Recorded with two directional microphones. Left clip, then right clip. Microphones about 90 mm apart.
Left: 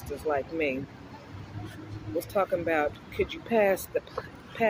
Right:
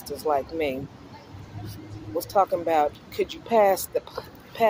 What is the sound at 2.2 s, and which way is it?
Speech, 25° left (ahead or behind).